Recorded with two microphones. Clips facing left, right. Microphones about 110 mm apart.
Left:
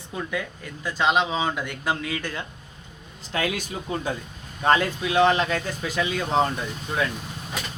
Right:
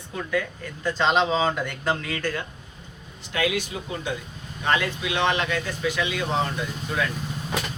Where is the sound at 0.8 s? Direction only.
10° left (ahead or behind).